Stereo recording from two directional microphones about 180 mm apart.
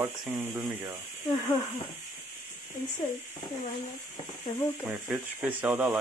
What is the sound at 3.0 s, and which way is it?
Speech, 20° left (ahead or behind).